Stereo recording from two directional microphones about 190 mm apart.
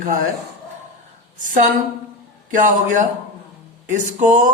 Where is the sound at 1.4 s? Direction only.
45° right (ahead or behind).